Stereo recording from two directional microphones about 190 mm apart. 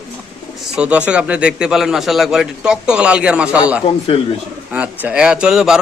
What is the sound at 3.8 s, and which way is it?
Speech, 30° left (ahead or behind).